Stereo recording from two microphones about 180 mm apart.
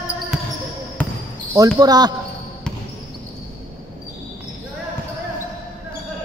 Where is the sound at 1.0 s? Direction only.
10° left (ahead or behind).